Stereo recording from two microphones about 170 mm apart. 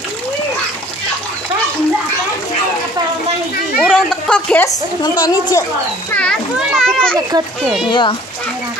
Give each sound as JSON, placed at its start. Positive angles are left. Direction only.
{"t": 3.8, "sound": "a sound", "side_deg": 5}
{"t": 5.2, "sound": "a woman's voice", "side_deg": 25}
{"t": 6.1, "sound": "a child's voice", "side_deg": 5}
{"t": 7.9, "sound": "a woman's voice", "side_deg": 30}